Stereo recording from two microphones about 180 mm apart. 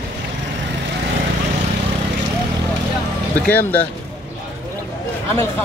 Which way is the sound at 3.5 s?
10° left (ahead or behind).